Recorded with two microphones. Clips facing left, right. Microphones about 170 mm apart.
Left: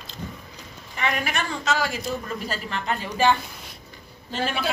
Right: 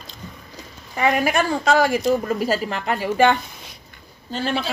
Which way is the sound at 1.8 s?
15° right (ahead or behind).